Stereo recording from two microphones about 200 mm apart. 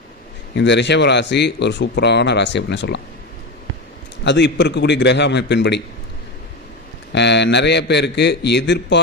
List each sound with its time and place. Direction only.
0.5 s speech: 60° left (ahead or behind)
4.2 s speech: 60° left (ahead or behind)
7.1 s speech: 60° left (ahead or behind)